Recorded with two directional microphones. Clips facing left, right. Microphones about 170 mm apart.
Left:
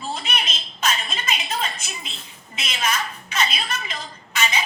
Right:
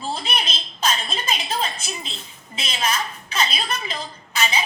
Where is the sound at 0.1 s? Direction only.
30° right (ahead or behind).